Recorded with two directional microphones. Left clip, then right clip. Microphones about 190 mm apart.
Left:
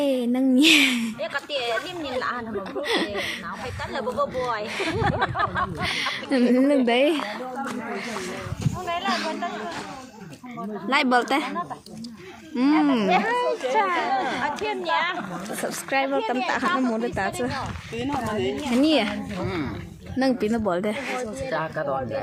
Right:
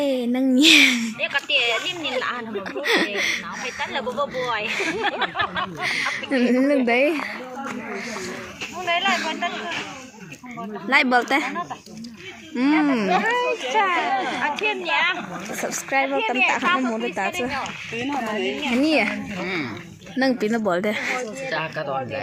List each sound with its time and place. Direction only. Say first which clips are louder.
0.0 s a woman's voice: right 1 dB; centre (ahead or behind)
10.8 s a woman's voice: right 3 dB; 5° right (ahead or behind)
12.8 s a woman's voice: right 1 dB; centre (ahead or behind)
13.2 s a woman's voice: right 2 dB; 20° right (ahead or behind)
17.6 s a woman's voice: right 3 dB; 20° right (ahead or behind)
18.7 s a woman's voice: right 1 dB; centre (ahead or behind)
21.5 s speech: even; 10° left (ahead or behind)